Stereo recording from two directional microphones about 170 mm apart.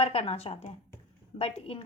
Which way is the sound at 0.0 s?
35° left (ahead or behind).